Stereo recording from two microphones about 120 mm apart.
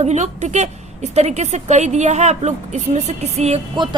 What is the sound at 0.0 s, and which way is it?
A woman's voice, 70° right (ahead or behind).